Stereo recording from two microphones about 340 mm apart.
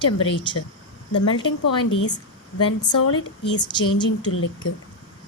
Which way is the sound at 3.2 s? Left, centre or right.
Left.